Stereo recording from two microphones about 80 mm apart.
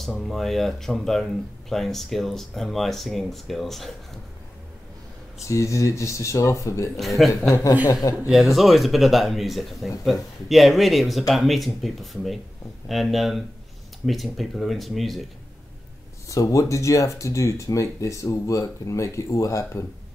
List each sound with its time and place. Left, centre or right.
0.0 s speech: centre
5.5 s speech: left
7.0 s speech: centre
7.8 s speech: left
8.3 s speech: centre
16.3 s speech: left